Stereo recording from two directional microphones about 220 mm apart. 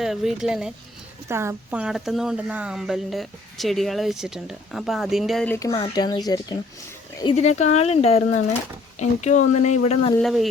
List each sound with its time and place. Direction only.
0.0 s speech: centre (ahead or behind)
5.7 s speech: 20° left (ahead or behind)
7.3 s speech: 30° left (ahead or behind)
10.2 s speech: centre (ahead or behind)